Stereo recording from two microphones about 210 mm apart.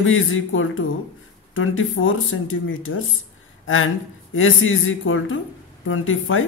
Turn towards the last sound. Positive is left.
turn(degrees=70)  # may be behind; listen again after turning